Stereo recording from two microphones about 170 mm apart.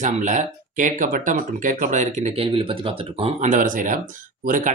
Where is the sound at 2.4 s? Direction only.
30° right (ahead or behind).